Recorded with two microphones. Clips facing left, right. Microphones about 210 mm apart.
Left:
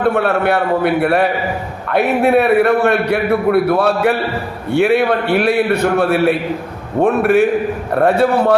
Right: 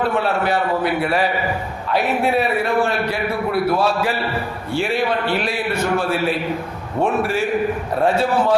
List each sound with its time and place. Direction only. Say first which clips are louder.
0.0 s a man's voice: left 5 dB; 60° left (ahead or behind)